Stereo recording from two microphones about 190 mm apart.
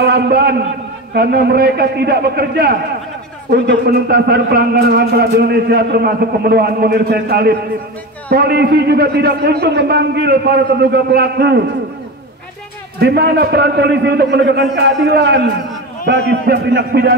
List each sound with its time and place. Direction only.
0.0 s a man's voice: 60° right (ahead or behind)
13.0 s a man's voice: 60° right (ahead or behind)
16.4 s a man's voice: 60° right (ahead or behind)